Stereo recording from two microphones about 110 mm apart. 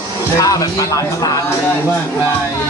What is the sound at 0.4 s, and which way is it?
Speech, 30° left (ahead or behind).